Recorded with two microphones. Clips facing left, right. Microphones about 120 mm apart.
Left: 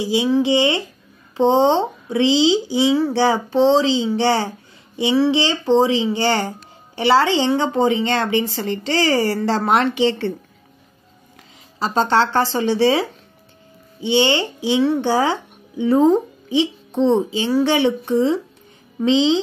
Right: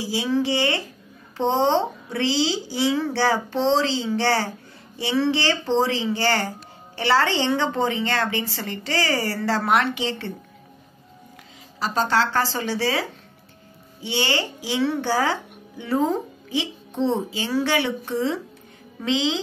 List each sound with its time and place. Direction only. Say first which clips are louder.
0.0 s a woman's voice: left 6 dB; 20° left (ahead or behind)
11.8 s a woman's voice: left 4 dB; 30° left (ahead or behind)
14.0 s a woman's voice: left 8 dB; 25° left (ahead or behind)